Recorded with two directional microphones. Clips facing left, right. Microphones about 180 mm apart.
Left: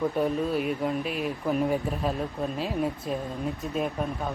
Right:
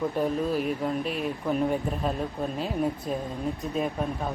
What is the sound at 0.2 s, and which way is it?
Speech, centre (ahead or behind).